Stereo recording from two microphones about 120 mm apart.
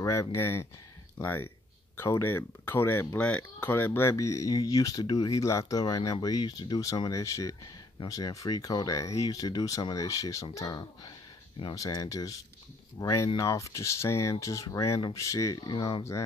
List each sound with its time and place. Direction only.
0.0 s speech: 25° left (ahead or behind)
16.0 s speech: 25° left (ahead or behind)